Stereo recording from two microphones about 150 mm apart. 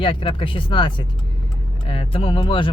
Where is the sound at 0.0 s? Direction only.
35° left (ahead or behind).